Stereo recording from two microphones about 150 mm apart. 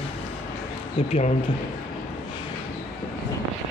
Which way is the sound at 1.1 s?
50° left (ahead or behind).